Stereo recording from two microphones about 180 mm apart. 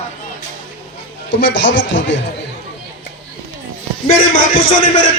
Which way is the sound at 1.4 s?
85° left.